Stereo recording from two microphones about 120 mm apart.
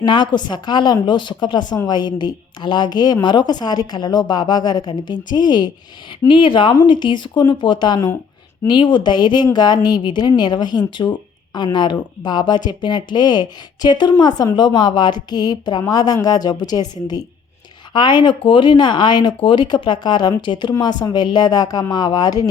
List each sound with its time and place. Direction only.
0.0 s speech: 40° left (ahead or behind)